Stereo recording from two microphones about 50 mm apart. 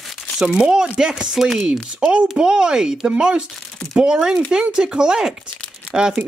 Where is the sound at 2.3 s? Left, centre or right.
Centre.